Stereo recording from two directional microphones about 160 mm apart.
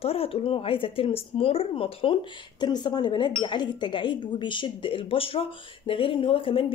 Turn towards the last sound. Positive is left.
turn(degrees=35)  # may be behind; listen again after turning